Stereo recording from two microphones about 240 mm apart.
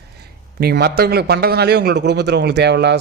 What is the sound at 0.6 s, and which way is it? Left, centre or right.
A man's voice, right.